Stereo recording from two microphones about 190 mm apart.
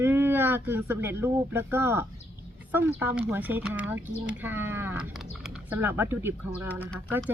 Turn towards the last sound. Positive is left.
turn(degrees=-10)  # may be behind; listen again after turning